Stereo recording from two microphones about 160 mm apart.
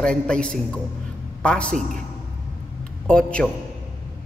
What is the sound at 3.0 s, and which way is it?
Speech, 5° left (ahead or behind).